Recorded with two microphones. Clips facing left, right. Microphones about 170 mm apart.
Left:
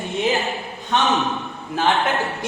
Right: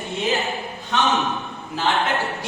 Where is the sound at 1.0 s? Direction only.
Centre (ahead or behind).